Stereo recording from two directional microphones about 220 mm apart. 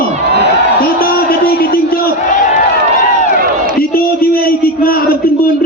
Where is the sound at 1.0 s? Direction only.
40° left (ahead or behind).